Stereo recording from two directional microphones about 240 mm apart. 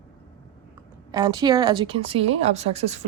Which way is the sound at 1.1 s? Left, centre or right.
Centre.